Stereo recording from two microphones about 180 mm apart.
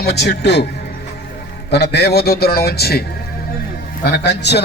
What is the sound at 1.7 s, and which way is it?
A man's voice, 70° left (ahead or behind).